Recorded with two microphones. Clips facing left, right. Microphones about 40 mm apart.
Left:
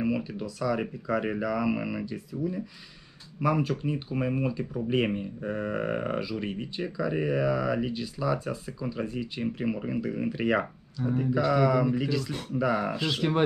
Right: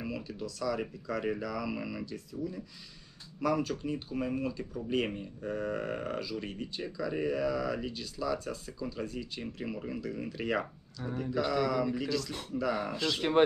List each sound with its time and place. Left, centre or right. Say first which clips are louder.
0.0 s speech: left 8 dB; left